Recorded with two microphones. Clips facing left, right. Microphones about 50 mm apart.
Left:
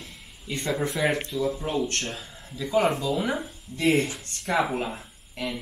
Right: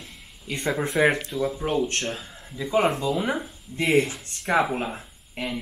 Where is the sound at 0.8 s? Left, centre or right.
Right.